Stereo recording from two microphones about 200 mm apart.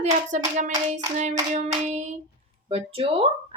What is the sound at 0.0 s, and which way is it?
A woman's voice, 40° right (ahead or behind).